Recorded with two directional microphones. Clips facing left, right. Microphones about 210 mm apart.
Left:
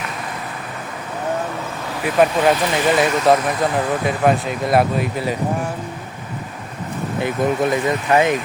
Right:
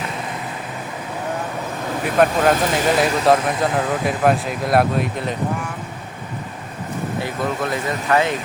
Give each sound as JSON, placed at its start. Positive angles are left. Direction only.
{"t": 2.1, "sound": "speech", "side_deg": 0}
{"t": 7.2, "sound": "speech", "side_deg": 20}